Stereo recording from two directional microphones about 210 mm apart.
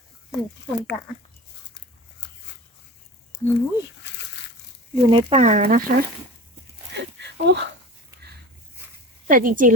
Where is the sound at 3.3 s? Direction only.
55° left (ahead or behind).